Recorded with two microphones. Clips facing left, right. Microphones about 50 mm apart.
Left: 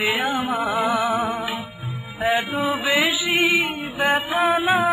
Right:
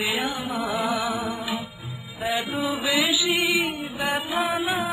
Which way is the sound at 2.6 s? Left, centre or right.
Left.